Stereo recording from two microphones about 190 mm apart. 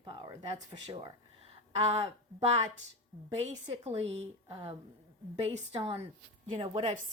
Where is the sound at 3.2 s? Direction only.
35° right (ahead or behind).